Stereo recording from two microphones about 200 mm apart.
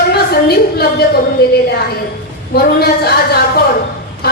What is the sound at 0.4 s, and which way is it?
A woman's voice, 50° left (ahead or behind).